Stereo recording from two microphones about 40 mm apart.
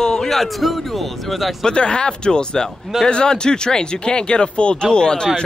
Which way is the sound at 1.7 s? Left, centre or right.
Left.